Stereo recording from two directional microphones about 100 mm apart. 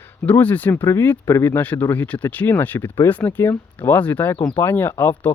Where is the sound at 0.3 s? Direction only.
15° left (ahead or behind).